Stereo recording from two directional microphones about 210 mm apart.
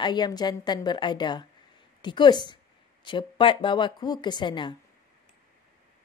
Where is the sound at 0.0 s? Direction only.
20° left (ahead or behind).